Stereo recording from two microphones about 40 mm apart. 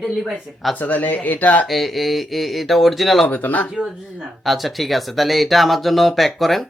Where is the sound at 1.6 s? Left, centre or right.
Centre.